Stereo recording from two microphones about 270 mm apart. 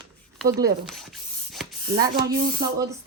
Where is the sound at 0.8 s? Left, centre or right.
Centre.